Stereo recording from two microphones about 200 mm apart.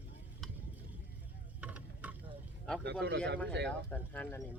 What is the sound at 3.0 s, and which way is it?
Speech, 60° right (ahead or behind).